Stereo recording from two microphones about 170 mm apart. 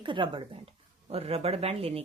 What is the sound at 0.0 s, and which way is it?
Speech, 30° right (ahead or behind).